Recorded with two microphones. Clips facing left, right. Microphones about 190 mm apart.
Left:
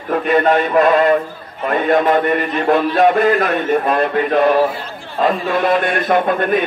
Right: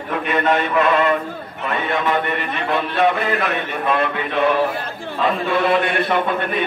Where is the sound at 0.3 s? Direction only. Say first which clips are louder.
Left 5 dB; 40° left (ahead or behind).